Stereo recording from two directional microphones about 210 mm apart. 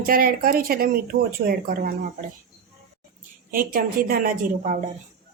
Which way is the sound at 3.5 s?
40° right (ahead or behind).